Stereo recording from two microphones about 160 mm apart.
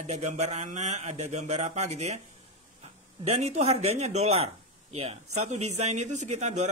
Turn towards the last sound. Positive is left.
turn(degrees=-45)  # may be behind; listen again after turning